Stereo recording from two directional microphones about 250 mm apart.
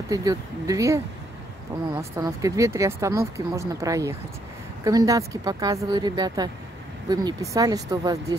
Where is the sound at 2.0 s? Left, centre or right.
Centre.